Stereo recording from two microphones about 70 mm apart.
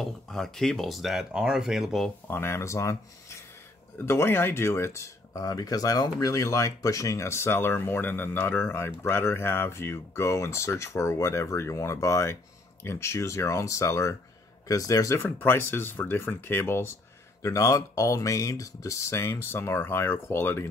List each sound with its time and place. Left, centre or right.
0.0 s speech: centre
2.2 s speech: left
4.0 s speech: left
15.1 s speech: left
17.4 s speech: left